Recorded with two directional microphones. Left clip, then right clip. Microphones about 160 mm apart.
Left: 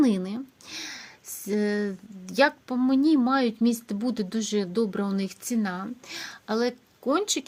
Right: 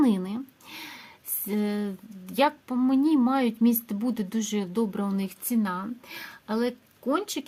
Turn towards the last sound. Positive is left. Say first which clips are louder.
# left 3 dB
turn(degrees=25)  # may be behind; listen again after turning